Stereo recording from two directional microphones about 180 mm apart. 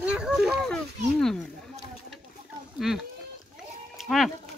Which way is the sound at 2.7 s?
Centre (ahead or behind).